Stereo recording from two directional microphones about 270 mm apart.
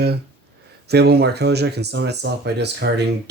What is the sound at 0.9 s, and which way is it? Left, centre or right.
Speech, right.